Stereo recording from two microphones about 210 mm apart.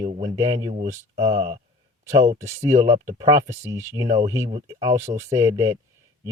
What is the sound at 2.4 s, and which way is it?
Speech, 30° right (ahead or behind).